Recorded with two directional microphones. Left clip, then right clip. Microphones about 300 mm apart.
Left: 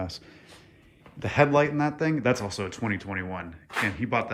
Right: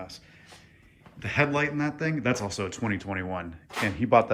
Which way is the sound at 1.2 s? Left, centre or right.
Centre.